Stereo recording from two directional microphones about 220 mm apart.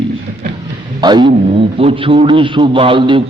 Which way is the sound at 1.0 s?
20° right (ahead or behind).